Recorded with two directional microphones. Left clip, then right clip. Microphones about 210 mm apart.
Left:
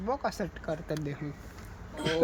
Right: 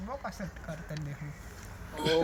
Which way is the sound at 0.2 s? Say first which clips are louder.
Left 8 dB; 55° left (ahead or behind).